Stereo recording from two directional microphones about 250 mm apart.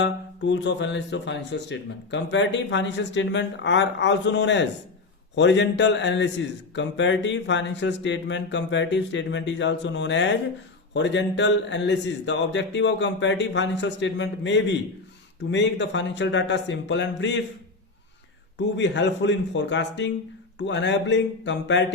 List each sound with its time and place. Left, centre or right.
0.0 s a man's voice: left
18.5 s a man's voice: left